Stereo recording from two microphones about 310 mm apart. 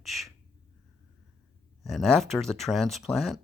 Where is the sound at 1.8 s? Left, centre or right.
Centre.